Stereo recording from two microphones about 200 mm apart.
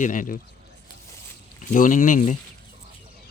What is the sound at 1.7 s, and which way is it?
Speech, 40° left (ahead or behind).